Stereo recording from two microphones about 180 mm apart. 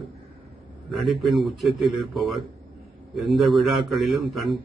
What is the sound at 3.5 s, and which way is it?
Speech, centre (ahead or behind).